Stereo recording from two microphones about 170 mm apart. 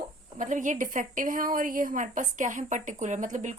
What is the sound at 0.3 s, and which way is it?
A woman's voice, 50° right (ahead or behind).